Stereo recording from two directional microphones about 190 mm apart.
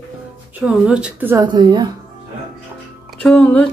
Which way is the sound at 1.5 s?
20° right (ahead or behind).